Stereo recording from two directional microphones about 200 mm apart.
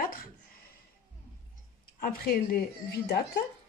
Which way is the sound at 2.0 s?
45° left (ahead or behind).